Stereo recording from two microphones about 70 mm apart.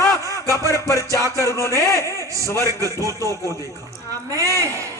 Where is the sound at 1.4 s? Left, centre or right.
Left.